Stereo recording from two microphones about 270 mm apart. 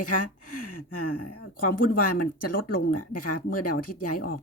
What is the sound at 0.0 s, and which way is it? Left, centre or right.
Speech, left.